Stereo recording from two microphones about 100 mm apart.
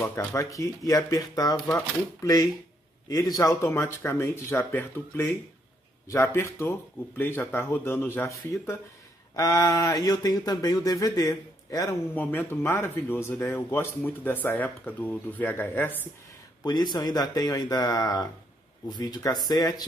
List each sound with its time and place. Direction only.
0.0 s speech: 30° left (ahead or behind)
12.2 s speech: 20° left (ahead or behind)
16.6 s speech: 45° left (ahead or behind)